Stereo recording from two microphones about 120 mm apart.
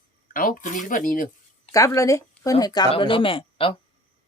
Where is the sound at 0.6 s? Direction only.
90° left.